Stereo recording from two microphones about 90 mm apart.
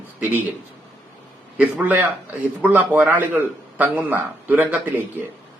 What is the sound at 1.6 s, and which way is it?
A man's voice, 20° right (ahead or behind).